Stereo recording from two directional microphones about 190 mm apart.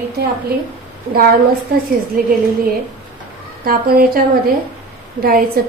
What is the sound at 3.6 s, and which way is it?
Speech, 50° right (ahead or behind).